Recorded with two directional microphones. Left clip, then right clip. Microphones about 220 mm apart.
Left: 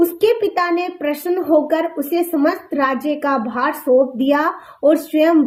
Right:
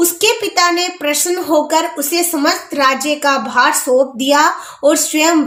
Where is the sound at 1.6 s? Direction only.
25° right (ahead or behind).